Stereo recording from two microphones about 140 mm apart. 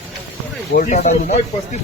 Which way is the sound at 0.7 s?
60° left (ahead or behind).